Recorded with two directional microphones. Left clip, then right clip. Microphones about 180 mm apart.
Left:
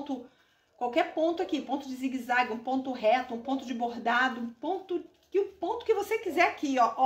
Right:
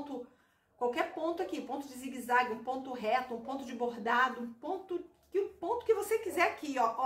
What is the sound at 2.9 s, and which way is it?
Speech, 25° left (ahead or behind).